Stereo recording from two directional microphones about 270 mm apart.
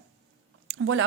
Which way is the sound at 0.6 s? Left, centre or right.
Right.